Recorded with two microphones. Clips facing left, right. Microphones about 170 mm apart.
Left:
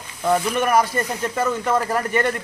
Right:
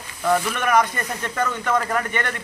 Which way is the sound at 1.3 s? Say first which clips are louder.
Left 1 dB; 30° left (ahead or behind).